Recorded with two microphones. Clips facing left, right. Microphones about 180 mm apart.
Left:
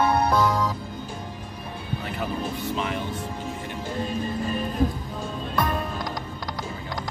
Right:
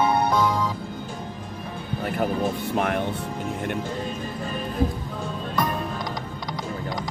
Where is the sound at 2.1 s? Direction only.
55° right (ahead or behind).